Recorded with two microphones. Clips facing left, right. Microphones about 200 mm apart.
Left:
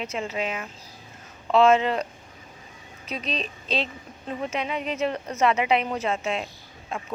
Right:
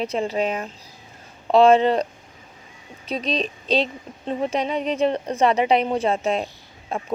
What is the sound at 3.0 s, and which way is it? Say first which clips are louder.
A woman's voice: right 6 dB; 35° right (ahead or behind).